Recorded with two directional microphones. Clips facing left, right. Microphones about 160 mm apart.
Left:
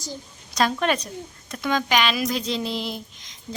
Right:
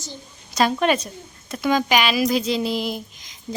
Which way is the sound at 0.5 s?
5° right (ahead or behind).